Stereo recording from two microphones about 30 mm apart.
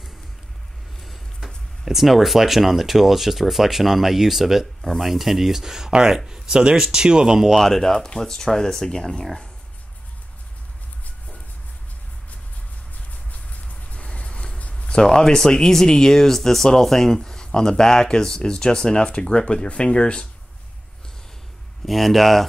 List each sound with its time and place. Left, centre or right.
1.9 s speech: centre
7.5 s speech: centre
8.2 s speech: centre
13.3 s vehicle: left
14.0 s vehicle: left
14.7 s a sound: left
15.0 s speech: centre; by 20.2 s left
21.8 s speech: centre